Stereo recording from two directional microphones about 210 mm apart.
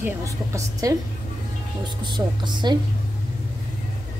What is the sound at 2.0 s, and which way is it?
Speech, 20° right (ahead or behind).